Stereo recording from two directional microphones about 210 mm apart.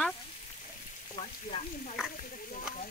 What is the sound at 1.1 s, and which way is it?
Frying, 30° left (ahead or behind).